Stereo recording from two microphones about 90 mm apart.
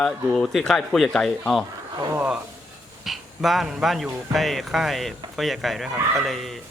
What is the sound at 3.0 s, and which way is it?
Speech, centre (ahead or behind).